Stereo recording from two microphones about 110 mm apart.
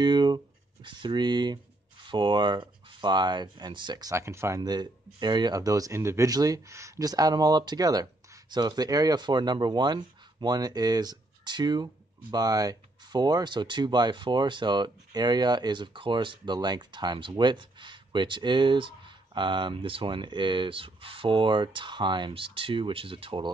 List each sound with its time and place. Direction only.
0.0 s writing: 40° right (ahead or behind)
0.8 s speech: 45° right (ahead or behind); by 4.6 s 25° right (ahead or behind)
4.6 s speech: 40° right (ahead or behind)